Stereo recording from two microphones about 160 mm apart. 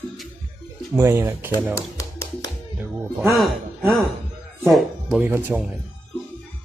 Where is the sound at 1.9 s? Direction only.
20° left (ahead or behind).